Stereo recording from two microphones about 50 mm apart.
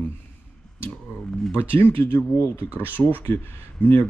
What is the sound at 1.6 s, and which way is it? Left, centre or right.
Speech, left.